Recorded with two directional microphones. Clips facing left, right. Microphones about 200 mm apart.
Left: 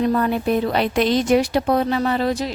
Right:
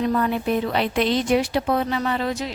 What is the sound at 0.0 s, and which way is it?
Speech, 40° left (ahead or behind).